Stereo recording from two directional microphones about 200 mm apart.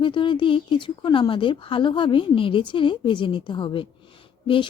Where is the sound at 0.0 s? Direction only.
25° left (ahead or behind).